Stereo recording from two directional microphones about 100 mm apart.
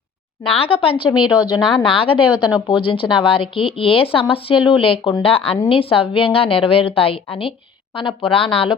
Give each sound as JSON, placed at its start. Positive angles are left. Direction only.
{"t": 0.6, "sound": "speech", "side_deg": 65}